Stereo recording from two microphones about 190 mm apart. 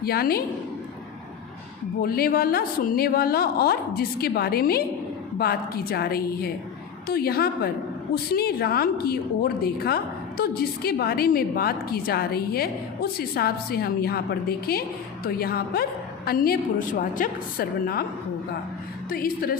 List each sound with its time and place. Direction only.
0.0 s a woman's voice: 55° left (ahead or behind)
2.0 s a woman's voice: 50° left (ahead or behind)
19.1 s a woman's voice: 50° left (ahead or behind)